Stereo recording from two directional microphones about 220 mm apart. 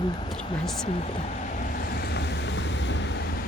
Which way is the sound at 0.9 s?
30° left (ahead or behind).